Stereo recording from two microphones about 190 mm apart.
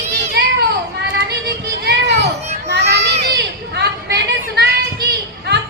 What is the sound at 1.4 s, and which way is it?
Children playing, 60° right (ahead or behind).